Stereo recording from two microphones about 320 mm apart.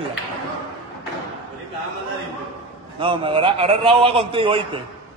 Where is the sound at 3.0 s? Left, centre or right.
Centre.